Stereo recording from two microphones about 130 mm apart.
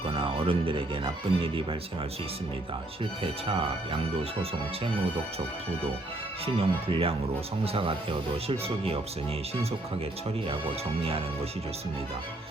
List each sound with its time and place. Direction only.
0.0 s speech: 45° right (ahead or behind)
3.5 s speech: 40° right (ahead or behind)
6.4 s speech: 50° right (ahead or behind)